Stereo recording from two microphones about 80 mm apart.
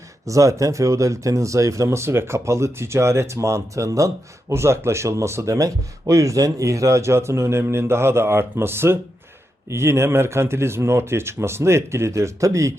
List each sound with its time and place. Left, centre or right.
0.3 s speech: right